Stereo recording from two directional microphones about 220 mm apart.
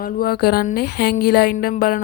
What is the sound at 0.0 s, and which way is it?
Speech, 45° left (ahead or behind).